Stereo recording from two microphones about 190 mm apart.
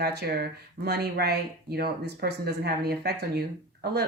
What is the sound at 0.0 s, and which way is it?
Speech, 55° right (ahead or behind).